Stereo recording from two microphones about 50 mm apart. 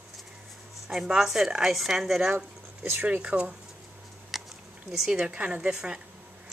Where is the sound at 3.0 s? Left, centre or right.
Right.